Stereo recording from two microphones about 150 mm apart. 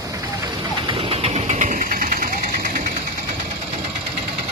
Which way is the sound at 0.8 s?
40° right (ahead or behind).